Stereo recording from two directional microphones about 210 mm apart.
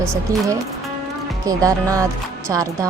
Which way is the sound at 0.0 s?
15° right (ahead or behind).